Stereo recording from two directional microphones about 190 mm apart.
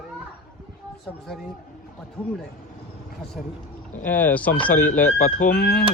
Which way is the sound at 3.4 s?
Centre (ahead or behind).